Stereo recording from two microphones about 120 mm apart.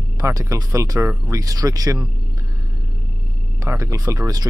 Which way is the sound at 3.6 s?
25° right (ahead or behind).